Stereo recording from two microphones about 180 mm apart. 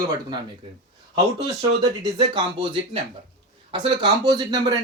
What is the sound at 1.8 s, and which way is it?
Speech, 25° right (ahead or behind).